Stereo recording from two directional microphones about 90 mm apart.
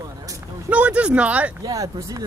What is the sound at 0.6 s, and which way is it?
Speech, 15° right (ahead or behind).